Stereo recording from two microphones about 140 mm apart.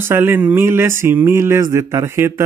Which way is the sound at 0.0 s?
15° right (ahead or behind).